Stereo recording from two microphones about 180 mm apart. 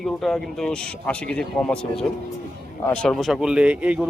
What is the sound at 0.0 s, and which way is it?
Speech, centre (ahead or behind).